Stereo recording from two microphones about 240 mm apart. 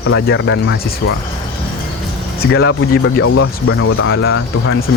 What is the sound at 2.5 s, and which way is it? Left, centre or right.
Speech, left.